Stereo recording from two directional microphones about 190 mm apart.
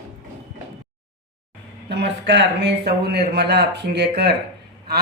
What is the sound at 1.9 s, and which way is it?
A man's voice, 65° right (ahead or behind).